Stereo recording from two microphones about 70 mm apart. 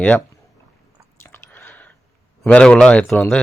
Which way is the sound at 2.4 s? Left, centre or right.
Centre.